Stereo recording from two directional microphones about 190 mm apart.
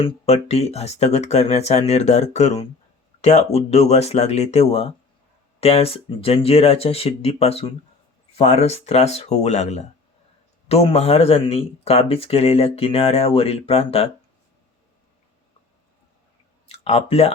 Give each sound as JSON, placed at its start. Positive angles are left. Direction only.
{"t": 0.0, "sound": "speech", "side_deg": 35}
{"t": 16.6, "sound": "speech", "side_deg": 30}